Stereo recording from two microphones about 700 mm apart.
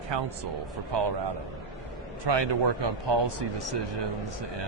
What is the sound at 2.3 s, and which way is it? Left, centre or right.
Speech, right.